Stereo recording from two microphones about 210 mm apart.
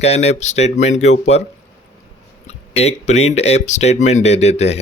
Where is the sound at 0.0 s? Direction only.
30° left (ahead or behind).